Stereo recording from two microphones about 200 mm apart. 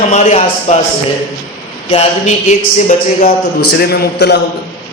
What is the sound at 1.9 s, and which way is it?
A man's voice, 30° left (ahead or behind).